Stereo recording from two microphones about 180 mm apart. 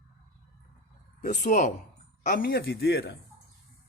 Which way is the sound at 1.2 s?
45° left (ahead or behind).